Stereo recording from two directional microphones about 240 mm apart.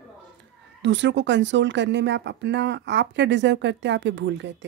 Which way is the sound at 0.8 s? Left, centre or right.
Right.